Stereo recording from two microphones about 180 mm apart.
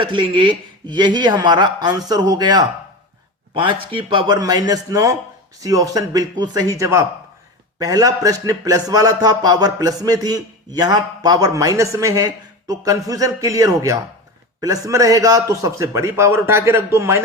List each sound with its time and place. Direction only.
0.0 s a man's voice: 25° right (ahead or behind)